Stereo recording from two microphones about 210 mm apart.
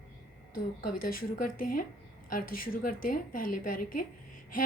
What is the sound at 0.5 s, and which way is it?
A woman's voice, 45° left (ahead or behind).